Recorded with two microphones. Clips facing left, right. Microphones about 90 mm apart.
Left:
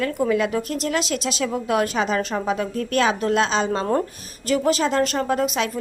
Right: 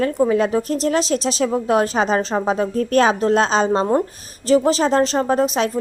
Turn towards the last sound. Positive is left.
turn(degrees=-35)  # may be behind; listen again after turning